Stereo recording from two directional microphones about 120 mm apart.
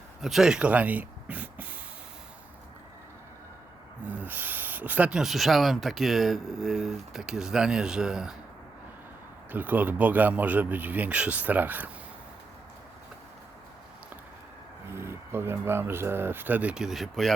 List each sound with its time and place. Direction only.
0.2 s speech: centre (ahead or behind)
4.0 s speech: 15° right (ahead or behind)
9.5 s speech: 15° right (ahead or behind)
14.9 s speech: 20° right (ahead or behind); by 17.3 s centre (ahead or behind)